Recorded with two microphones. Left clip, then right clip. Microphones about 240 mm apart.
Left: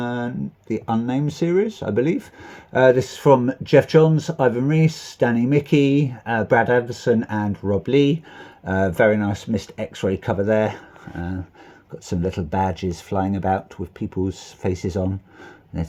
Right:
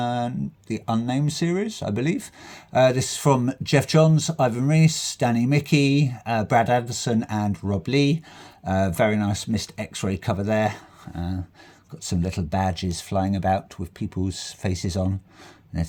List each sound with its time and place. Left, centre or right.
0.0 s speech: right
12.0 s speech: right